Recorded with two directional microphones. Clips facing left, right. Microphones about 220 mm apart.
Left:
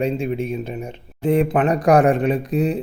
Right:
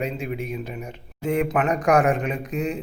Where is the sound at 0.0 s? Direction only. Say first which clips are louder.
Left 6 dB; 30° left (ahead or behind).